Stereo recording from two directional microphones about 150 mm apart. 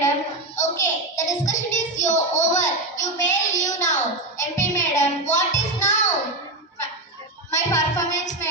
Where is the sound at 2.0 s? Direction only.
55° left (ahead or behind).